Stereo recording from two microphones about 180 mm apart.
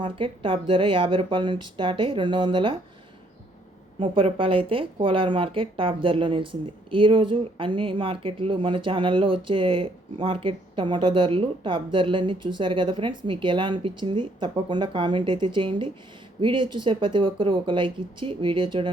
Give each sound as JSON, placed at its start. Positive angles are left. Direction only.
{"t": 0.0, "sound": "speech", "side_deg": -30}
{"t": 4.0, "sound": "speech", "side_deg": -30}